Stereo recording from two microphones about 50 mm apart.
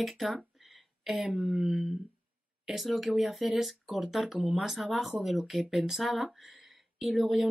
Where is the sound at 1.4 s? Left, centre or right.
Centre.